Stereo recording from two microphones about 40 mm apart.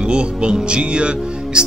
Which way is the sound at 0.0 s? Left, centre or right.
Right.